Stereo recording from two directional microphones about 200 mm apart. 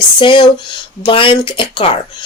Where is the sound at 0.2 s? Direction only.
25° left (ahead or behind).